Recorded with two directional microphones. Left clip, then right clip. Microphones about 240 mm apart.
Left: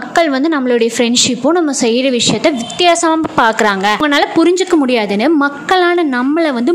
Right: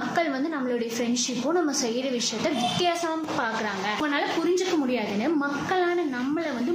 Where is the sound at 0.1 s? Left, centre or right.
Left.